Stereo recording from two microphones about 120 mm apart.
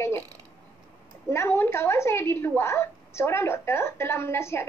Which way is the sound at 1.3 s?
20° left (ahead or behind).